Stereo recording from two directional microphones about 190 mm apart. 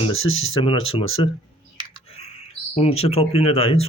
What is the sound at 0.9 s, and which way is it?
Speech, 30° left (ahead or behind).